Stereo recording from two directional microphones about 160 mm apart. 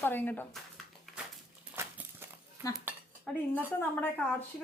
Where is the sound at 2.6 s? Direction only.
15° right (ahead or behind).